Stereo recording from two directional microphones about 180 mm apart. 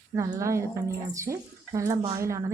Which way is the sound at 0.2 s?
15° right (ahead or behind).